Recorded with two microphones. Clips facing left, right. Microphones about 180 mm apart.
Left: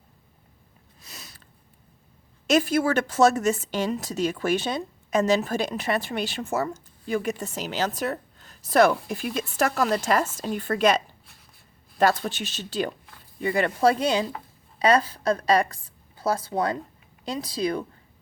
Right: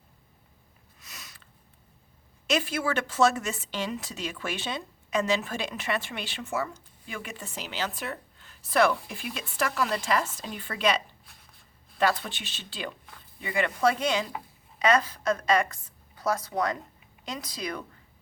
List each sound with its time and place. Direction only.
1.0 s sniff: 30° left (ahead or behind)
2.5 s a woman's voice: 45° left (ahead or behind)